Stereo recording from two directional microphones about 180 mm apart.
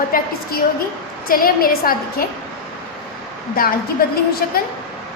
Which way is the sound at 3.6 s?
55° left (ahead or behind).